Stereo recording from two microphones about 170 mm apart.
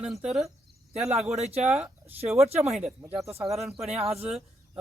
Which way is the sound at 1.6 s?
10° right (ahead or behind).